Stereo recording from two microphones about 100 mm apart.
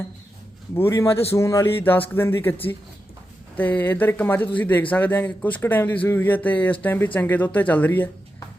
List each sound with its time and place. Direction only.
0.8 s speech: 25° left (ahead or behind)
1.8 s speech: 20° left (ahead or behind)
3.6 s speech: 15° left (ahead or behind)